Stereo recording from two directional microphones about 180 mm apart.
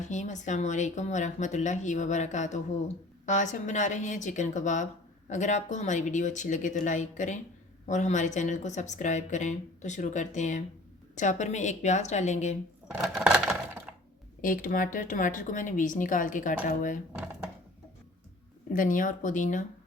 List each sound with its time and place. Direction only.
0.0 s a woman's voice: 40° left (ahead or behind)
12.9 s a sound: 5° right (ahead or behind)
14.4 s speech: 50° left (ahead or behind)
18.7 s speech: 45° left (ahead or behind)